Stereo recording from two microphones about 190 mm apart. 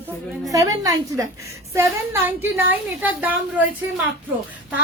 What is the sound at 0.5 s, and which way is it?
A woman's voice, 20° right (ahead or behind).